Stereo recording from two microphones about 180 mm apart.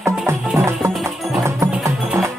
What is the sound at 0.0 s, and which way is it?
Music, 15° right (ahead or behind).